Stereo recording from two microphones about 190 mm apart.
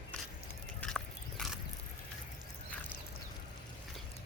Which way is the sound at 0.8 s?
5° left (ahead or behind).